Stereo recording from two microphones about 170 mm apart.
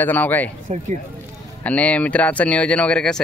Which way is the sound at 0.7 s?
40° right (ahead or behind).